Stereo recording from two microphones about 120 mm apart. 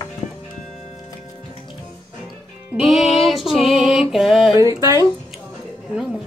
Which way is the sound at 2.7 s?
5° right (ahead or behind).